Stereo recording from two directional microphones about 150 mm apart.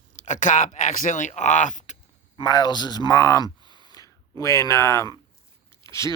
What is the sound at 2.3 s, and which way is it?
Speech, 25° left (ahead or behind).